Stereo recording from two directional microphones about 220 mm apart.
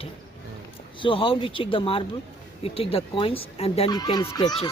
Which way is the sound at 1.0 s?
25° left (ahead or behind).